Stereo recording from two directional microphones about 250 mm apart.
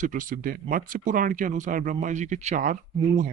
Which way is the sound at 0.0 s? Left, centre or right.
Right.